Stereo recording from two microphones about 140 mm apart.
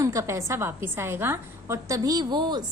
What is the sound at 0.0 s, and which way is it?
A woman's voice, 20° right (ahead or behind).